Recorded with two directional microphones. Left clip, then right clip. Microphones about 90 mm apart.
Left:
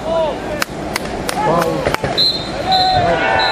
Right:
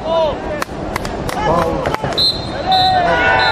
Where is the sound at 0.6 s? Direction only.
35° left (ahead or behind).